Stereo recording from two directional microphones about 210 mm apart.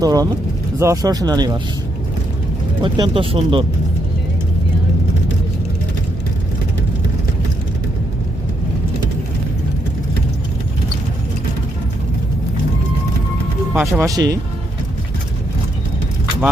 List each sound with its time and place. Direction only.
0.0 s speech: 15° right (ahead or behind)
2.8 s speech: 25° right (ahead or behind)
13.7 s speech: 10° right (ahead or behind)